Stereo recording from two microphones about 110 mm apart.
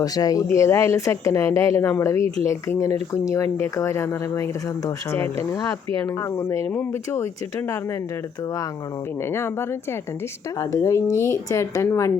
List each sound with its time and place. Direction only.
0.0 s speech: 35° left (ahead or behind)
9.3 s speech: 20° left (ahead or behind)